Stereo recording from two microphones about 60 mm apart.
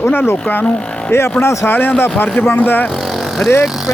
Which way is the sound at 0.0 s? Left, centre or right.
Left.